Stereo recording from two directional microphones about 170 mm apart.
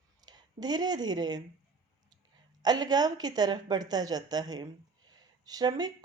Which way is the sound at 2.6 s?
25° right (ahead or behind).